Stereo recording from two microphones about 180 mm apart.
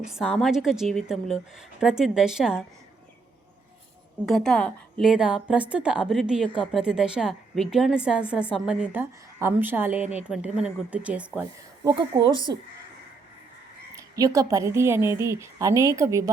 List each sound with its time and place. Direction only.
0.0 s a woman's voice: 5° right (ahead or behind)
4.3 s a woman's voice: 5° left (ahead or behind)
11.9 s speech: 25° right (ahead or behind)
13.9 s a woman's voice: 20° right (ahead or behind)